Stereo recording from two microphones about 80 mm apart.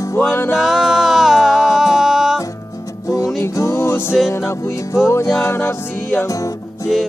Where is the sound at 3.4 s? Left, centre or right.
Left.